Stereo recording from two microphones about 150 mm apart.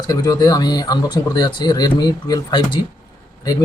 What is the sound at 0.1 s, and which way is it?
Speech, 25° left (ahead or behind).